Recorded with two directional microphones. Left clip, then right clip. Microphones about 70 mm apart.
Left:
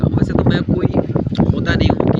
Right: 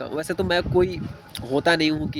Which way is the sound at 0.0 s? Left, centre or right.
Left.